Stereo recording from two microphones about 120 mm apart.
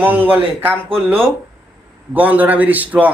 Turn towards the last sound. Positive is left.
turn(degrees=-15)  # may be behind; listen again after turning